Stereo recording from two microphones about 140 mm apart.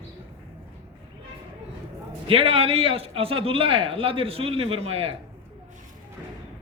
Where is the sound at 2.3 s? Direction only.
40° right (ahead or behind).